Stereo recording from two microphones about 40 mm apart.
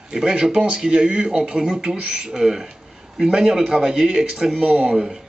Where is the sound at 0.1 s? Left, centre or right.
Centre.